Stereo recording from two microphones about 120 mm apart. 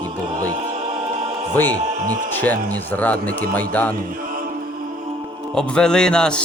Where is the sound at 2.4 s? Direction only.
15° left (ahead or behind).